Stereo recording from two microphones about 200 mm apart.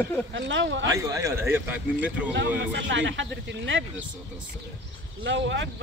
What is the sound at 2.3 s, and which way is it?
Speech, 65° right (ahead or behind).